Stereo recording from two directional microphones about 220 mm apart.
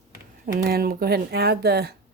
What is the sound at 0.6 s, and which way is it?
Speech, 45° right (ahead or behind).